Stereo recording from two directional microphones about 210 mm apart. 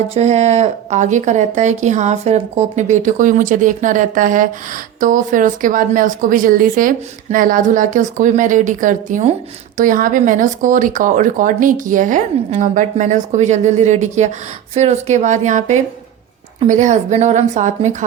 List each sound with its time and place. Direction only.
0.1 s speech: 30° right (ahead or behind)